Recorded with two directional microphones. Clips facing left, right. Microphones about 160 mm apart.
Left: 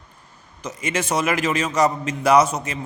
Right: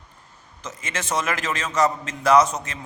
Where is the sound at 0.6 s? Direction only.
10° left (ahead or behind).